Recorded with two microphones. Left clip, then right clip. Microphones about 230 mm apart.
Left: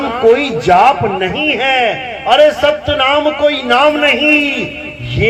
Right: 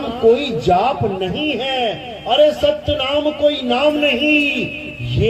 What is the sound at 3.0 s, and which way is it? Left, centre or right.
Speech, centre.